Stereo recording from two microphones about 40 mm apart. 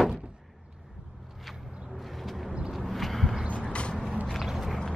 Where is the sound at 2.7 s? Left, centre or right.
Centre.